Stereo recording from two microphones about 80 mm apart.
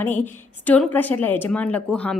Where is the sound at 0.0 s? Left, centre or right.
Left.